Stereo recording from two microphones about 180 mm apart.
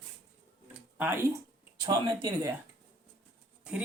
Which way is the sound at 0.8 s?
10° right (ahead or behind).